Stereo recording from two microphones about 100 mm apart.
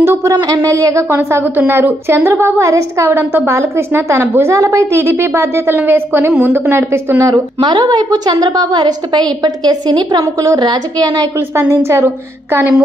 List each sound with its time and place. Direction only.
0.0 s speech: 25° right (ahead or behind)
0.3 s a woman's voice: 45° right (ahead or behind)
0.6 s a woman's voice: 30° right (ahead or behind)
7.6 s a woman's voice: 50° right (ahead or behind)
11.7 s a woman's voice: 25° right (ahead or behind)